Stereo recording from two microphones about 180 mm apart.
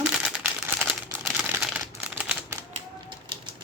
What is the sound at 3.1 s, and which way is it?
Typewriter, 25° right (ahead or behind).